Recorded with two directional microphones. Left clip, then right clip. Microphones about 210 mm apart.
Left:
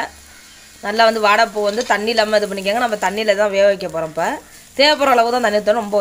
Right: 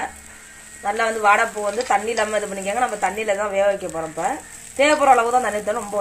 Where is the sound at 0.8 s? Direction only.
60° left (ahead or behind).